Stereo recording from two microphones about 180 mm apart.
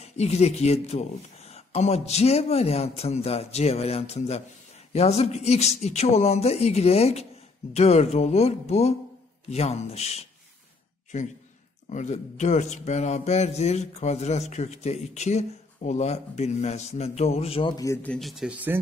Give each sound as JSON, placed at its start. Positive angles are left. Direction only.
{"t": 0.0, "sound": "a man's voice", "side_deg": 35}